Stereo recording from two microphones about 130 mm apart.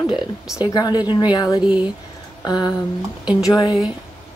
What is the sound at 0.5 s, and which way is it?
Speech, 30° left (ahead or behind).